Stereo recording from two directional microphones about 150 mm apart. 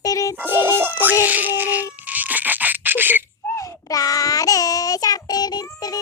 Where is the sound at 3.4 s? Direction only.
20° left (ahead or behind).